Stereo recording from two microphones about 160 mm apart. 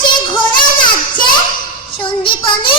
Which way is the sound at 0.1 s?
30° left (ahead or behind).